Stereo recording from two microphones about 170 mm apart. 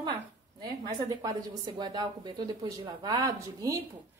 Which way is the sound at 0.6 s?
20° right (ahead or behind).